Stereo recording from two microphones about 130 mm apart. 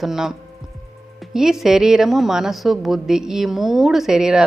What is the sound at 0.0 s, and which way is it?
A woman's voice, 5° right (ahead or behind).